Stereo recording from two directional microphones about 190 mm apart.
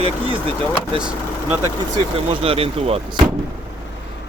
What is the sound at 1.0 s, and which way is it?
Speech, 5° right (ahead or behind).